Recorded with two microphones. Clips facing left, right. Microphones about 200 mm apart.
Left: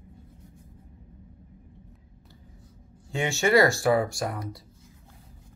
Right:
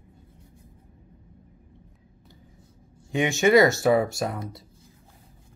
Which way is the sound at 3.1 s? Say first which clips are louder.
Right 4 dB; 20° right (ahead or behind).